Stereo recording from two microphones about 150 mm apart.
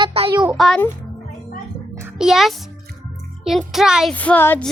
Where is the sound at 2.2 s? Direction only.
Centre (ahead or behind).